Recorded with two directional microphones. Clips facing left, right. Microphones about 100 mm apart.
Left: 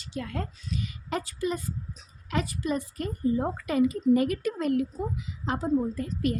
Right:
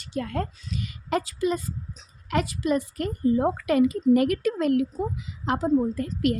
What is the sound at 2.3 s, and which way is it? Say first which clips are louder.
A woman's voice: right 5 dB; 70° right (ahead or behind).